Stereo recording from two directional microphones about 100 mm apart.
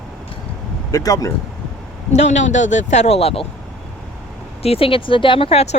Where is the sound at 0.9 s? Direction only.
35° left (ahead or behind).